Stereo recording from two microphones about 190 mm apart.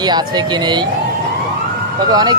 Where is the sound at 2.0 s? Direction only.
20° right (ahead or behind).